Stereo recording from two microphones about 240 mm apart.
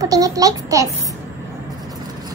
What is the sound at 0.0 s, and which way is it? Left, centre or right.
Speech, centre.